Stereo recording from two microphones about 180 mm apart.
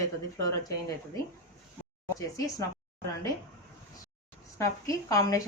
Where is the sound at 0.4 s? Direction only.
20° left (ahead or behind).